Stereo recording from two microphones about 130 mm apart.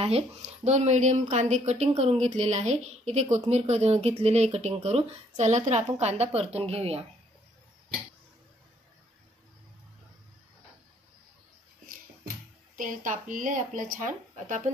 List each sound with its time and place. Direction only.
0.0 s a woman's voice: 55° right (ahead or behind)
12.7 s speech: 90° right